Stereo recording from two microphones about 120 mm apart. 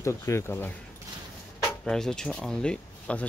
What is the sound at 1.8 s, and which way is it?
Speech, 5° left (ahead or behind).